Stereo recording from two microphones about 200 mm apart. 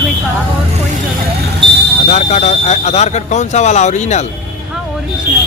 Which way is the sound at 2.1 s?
35° left (ahead or behind).